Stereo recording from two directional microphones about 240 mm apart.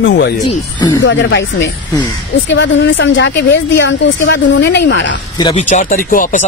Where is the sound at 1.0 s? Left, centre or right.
Left.